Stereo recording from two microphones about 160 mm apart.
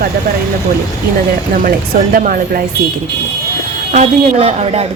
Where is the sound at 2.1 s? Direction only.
60° right (ahead or behind).